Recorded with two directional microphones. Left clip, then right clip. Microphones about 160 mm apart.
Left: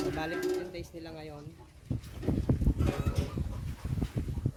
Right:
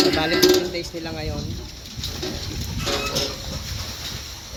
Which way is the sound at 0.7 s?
Centre (ahead or behind).